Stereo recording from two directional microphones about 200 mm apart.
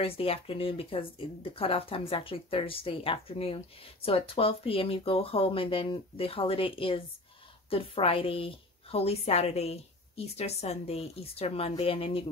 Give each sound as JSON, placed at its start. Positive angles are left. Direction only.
{"t": 0.0, "sound": "speech", "side_deg": 30}